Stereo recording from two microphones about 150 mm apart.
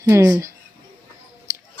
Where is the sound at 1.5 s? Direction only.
15° right (ahead or behind).